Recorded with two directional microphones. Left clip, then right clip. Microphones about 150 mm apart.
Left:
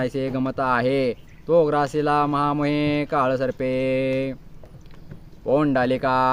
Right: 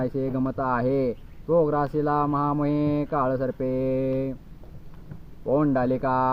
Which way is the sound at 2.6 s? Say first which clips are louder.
Left 3 dB; 50° left (ahead or behind).